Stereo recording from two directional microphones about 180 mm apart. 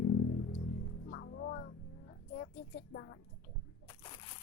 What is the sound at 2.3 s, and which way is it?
Child singing, 65° left (ahead or behind).